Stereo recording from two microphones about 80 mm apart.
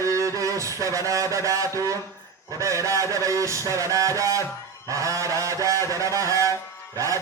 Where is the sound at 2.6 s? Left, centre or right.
Right.